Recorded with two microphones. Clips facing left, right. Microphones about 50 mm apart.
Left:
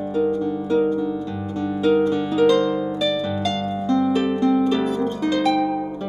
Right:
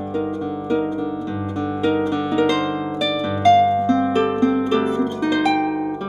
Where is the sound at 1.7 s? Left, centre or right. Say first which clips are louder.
Left 2 dB; right.